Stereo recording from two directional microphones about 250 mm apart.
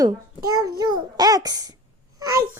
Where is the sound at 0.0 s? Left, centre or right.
Centre.